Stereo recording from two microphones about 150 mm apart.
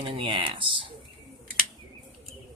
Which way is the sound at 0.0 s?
35° right (ahead or behind).